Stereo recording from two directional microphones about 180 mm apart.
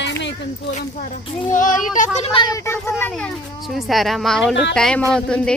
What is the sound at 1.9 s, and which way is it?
A child's voice, 35° left (ahead or behind).